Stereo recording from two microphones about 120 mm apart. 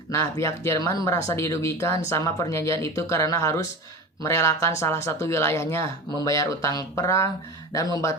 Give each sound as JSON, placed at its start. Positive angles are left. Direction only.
{"t": 0.1, "sound": "speech", "side_deg": 25}